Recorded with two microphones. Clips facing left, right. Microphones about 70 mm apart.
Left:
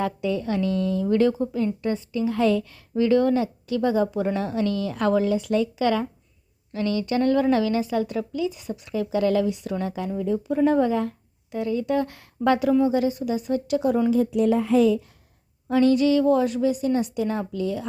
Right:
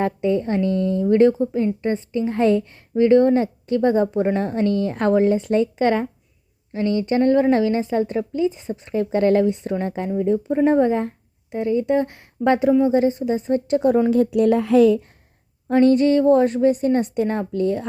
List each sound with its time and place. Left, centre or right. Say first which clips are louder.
0.0 s a woman's voice: right 5 dB; right
15.7 s a woman's voice: right 3 dB; right